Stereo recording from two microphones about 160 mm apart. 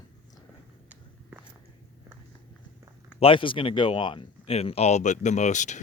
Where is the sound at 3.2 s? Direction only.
35° left (ahead or behind).